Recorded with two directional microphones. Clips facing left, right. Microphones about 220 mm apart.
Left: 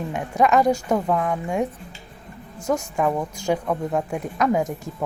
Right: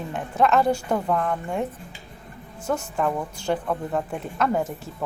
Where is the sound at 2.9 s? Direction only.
10° left (ahead or behind).